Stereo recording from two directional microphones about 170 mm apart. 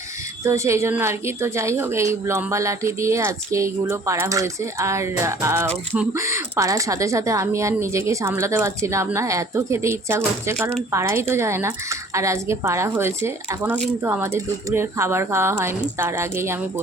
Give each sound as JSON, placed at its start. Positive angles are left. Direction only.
{"t": 0.4, "sound": "speech", "side_deg": -15}